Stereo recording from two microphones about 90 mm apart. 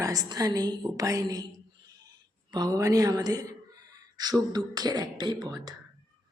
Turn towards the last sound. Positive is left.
turn(degrees=-50)  # may be behind; listen again after turning